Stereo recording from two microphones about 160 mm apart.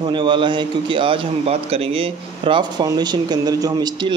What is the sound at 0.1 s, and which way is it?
A man's voice, 30° right (ahead or behind).